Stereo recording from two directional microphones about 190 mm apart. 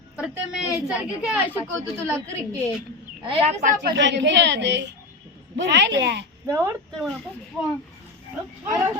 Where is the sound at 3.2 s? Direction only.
40° right (ahead or behind).